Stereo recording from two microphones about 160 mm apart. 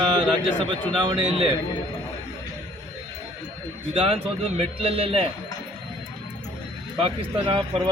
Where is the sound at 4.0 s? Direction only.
35° right (ahead or behind).